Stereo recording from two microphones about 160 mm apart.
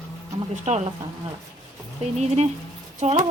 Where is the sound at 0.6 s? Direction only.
45° right (ahead or behind).